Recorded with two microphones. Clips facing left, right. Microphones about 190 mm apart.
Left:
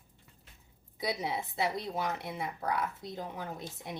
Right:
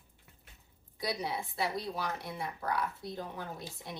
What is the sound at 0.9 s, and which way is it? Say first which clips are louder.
Speech: left 1 dB; 20° left (ahead or behind).